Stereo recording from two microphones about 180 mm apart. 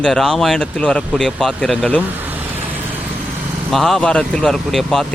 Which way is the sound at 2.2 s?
10° right (ahead or behind).